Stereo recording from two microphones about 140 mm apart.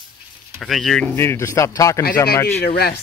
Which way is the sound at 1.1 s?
15° left (ahead or behind).